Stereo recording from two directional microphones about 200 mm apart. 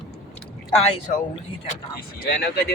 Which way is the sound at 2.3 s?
55° left (ahead or behind).